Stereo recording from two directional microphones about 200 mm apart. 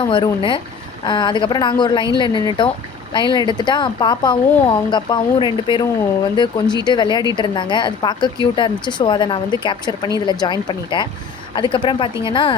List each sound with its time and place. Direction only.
0.0 s speech: 25° left (ahead or behind)